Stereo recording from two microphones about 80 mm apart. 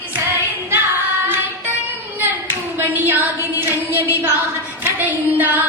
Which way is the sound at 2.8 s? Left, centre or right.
Right.